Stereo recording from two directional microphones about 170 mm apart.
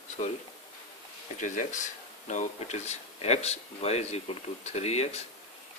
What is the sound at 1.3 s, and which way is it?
Speech, 45° left (ahead or behind).